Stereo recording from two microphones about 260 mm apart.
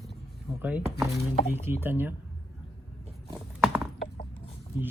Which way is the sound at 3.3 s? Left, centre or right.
Centre.